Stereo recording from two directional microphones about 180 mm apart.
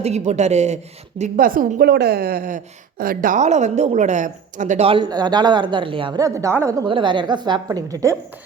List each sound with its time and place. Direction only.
0.0 s speech: 40° right (ahead or behind)
1.2 s a woman's voice: 50° right (ahead or behind)
4.9 s a woman's voice: 25° right (ahead or behind)
6.8 s a woman's voice: 25° right (ahead or behind)